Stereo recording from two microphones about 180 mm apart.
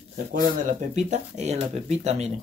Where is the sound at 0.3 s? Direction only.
45° right (ahead or behind).